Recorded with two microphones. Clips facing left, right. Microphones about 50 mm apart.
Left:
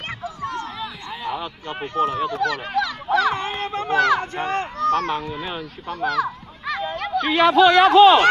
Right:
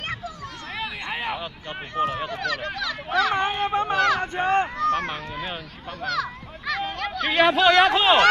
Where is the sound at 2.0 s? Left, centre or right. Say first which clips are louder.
Left 4 dB; centre.